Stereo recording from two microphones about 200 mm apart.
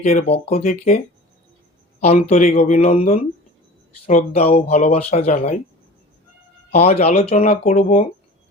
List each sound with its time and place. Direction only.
0.0 s speech: 30° left (ahead or behind)
2.0 s speech: 35° left (ahead or behind)
6.7 s speech: 30° left (ahead or behind)